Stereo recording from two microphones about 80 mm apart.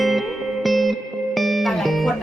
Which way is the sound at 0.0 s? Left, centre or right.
Centre.